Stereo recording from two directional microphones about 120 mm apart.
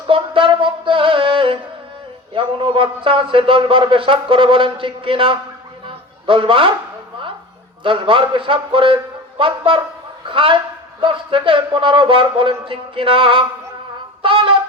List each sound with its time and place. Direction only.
0.1 s music: 45° right (ahead or behind)
2.3 s a man's voice: 45° right (ahead or behind)
5.8 s a sound: 45° right (ahead or behind)
7.9 s a man's voice: 45° right (ahead or behind)
14.2 s trumpet: 45° right (ahead or behind)